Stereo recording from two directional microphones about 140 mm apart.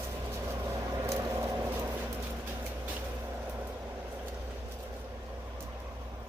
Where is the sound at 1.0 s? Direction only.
20° right (ahead or behind).